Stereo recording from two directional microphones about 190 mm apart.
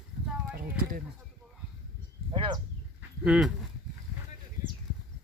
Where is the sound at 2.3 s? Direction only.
25° right (ahead or behind).